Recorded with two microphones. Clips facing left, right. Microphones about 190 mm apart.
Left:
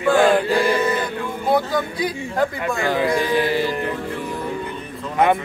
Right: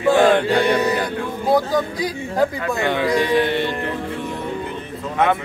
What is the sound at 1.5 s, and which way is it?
Speech, 35° right (ahead or behind).